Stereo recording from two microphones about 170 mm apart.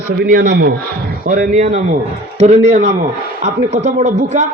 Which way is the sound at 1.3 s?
45° right (ahead or behind).